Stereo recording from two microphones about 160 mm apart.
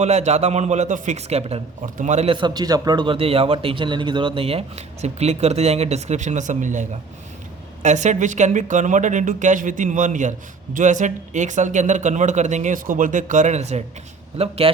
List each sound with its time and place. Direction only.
0.0 s a man's voice: 45° right (ahead or behind)